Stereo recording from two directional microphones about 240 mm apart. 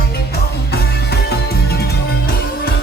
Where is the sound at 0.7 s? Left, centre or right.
Left.